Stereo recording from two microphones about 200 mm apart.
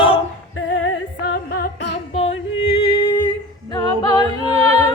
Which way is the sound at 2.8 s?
30° left (ahead or behind).